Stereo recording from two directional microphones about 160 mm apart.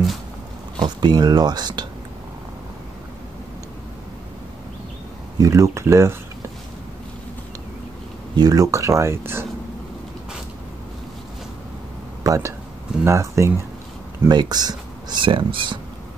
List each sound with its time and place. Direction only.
0.7 s speech: 25° right (ahead or behind)
5.4 s speech: 20° right (ahead or behind)
8.4 s speech: 20° right (ahead or behind)
12.2 s speech: 20° right (ahead or behind)